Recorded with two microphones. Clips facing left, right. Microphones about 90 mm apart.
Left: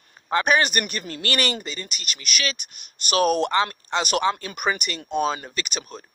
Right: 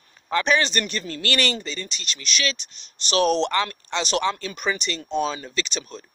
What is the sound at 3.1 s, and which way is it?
Speech, 50° left (ahead or behind).